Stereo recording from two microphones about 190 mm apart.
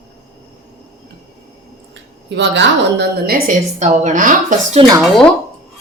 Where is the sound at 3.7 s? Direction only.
35° right (ahead or behind).